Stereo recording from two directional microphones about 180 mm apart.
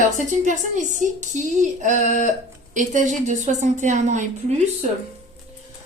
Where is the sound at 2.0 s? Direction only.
45° left (ahead or behind).